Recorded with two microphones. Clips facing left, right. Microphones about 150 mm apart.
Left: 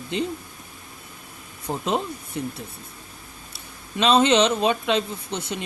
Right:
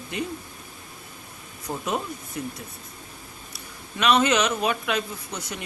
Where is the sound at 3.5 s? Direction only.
30° left (ahead or behind).